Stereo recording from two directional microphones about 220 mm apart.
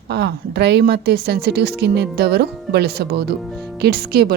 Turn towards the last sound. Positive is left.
turn(degrees=-45)  # may be behind; listen again after turning